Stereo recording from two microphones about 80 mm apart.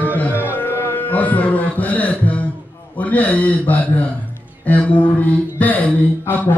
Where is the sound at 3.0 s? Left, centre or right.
Centre.